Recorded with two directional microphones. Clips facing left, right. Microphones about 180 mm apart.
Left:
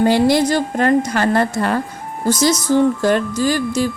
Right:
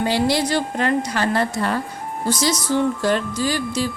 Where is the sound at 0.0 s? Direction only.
50° left (ahead or behind).